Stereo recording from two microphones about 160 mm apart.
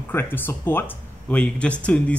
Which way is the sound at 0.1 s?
15° left (ahead or behind).